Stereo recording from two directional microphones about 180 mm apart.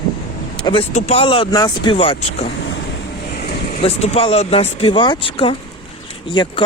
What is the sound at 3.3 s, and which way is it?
Vehicle, 65° left (ahead or behind).